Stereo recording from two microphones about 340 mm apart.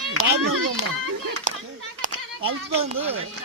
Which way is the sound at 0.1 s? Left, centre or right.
Right.